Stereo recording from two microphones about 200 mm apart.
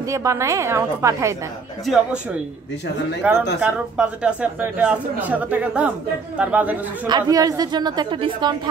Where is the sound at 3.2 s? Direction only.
5° right (ahead or behind).